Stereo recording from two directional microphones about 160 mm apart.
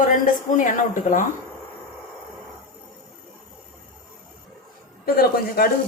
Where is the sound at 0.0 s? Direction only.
55° left (ahead or behind).